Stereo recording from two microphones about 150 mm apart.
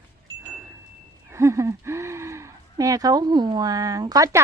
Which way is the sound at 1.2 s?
20° right (ahead or behind).